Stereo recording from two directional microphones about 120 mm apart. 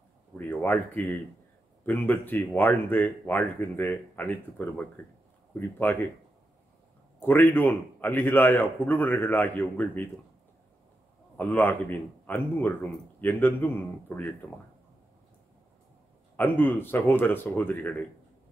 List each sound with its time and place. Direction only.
0.4 s a sound: 15° left (ahead or behind)
1.9 s speech: 15° left (ahead or behind)
7.2 s speech: 15° left (ahead or behind)
11.3 s speech: 15° left (ahead or behind)
16.3 s speech: 15° left (ahead or behind)